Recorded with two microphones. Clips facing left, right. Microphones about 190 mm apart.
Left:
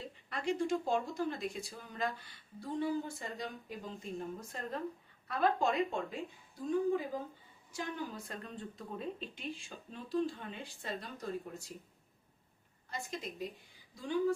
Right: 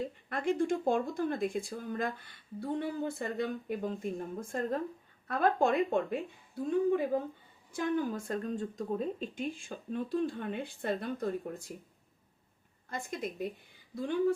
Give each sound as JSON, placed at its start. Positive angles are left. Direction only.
{"t": 0.0, "sound": "speech", "side_deg": -50}
{"t": 7.7, "sound": "speech", "side_deg": -55}
{"t": 12.9, "sound": "speech", "side_deg": -50}